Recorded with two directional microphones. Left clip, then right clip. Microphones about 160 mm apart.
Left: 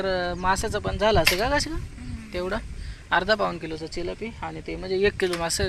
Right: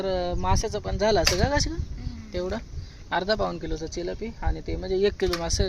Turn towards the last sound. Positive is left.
turn(degrees=-5)  # may be behind; listen again after turning